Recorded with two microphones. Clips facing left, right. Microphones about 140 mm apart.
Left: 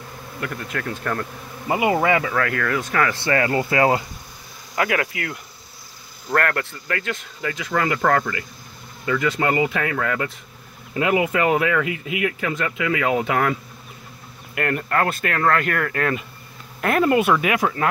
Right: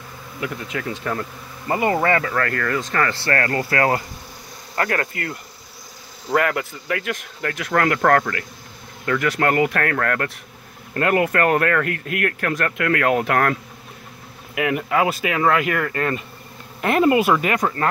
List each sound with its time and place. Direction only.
0.4 s speech: 5° right (ahead or behind)
1.7 s speech: 5° left (ahead or behind)
4.7 s speech: 5° left (ahead or behind)